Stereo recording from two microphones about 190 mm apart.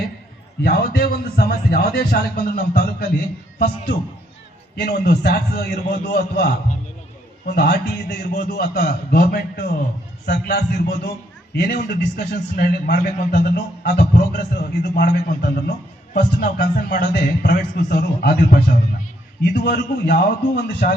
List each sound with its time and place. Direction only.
0.6 s a man's voice: 55° left (ahead or behind)
7.5 s a man's voice: 55° left (ahead or behind)